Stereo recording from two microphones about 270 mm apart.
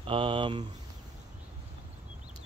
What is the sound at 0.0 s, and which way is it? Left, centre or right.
Speech, centre.